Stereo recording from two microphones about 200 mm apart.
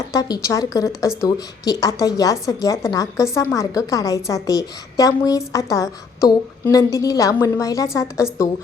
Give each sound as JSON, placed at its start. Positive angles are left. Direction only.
{"t": 0.1, "sound": "a woman's voice", "side_deg": 15}